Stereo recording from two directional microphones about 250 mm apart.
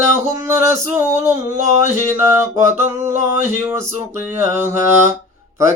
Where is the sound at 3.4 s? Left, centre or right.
Centre.